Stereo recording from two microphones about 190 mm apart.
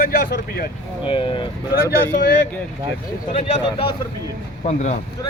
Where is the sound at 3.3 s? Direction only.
30° left (ahead or behind).